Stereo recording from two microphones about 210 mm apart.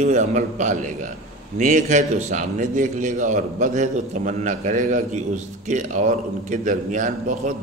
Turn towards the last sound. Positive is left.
turn(degrees=-35)  # may be behind; listen again after turning